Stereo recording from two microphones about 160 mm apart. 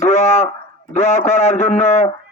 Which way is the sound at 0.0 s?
45° left (ahead or behind).